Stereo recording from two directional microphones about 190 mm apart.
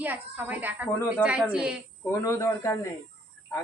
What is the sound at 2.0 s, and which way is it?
Speech, 15° left (ahead or behind).